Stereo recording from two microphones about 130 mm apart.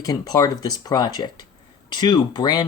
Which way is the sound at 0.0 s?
30° left (ahead or behind).